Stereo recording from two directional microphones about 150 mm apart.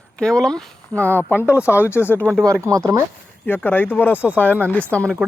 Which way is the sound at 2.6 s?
25° right (ahead or behind).